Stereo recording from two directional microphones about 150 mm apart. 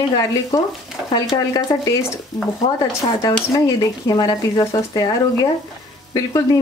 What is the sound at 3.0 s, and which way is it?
Speech, 30° left (ahead or behind).